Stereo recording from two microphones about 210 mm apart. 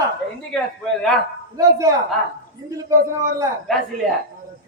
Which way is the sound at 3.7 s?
Centre (ahead or behind).